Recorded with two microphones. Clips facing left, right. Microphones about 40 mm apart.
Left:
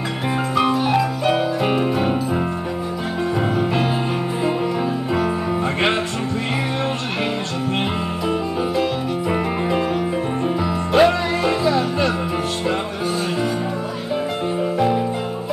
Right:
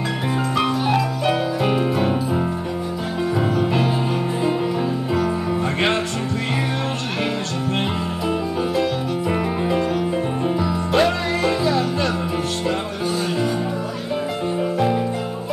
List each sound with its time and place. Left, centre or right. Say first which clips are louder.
0.6 s music: left 3 dB; centre
9.3 s music: left 1 dB; centre